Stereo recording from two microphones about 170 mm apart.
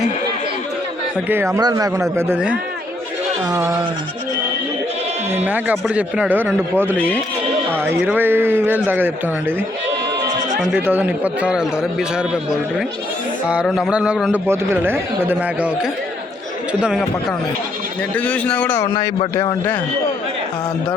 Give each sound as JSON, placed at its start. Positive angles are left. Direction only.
{"t": 1.3, "sound": "a man's voice", "side_deg": -15}
{"t": 3.6, "sound": "a sound", "side_deg": -5}
{"t": 5.3, "sound": "a man's voice", "side_deg": -10}
{"t": 10.8, "sound": "a man's voice", "side_deg": -10}
{"t": 13.5, "sound": "a sound", "side_deg": -5}
{"t": 14.4, "sound": "a man's voice", "side_deg": -15}
{"t": 18.1, "sound": "a man's voice", "side_deg": 10}